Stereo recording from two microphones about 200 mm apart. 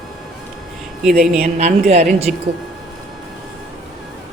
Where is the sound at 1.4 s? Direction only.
40° right (ahead or behind).